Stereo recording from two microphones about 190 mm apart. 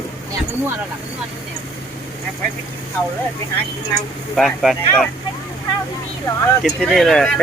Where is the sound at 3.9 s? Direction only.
Centre (ahead or behind).